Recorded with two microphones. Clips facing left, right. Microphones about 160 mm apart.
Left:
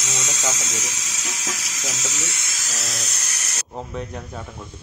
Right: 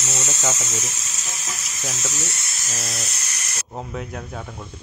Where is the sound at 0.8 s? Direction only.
90° left.